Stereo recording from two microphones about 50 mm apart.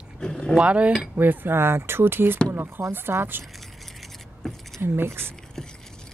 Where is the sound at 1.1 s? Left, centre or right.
Right.